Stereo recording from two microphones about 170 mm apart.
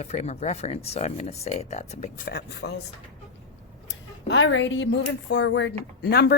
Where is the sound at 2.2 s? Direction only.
75° left (ahead or behind).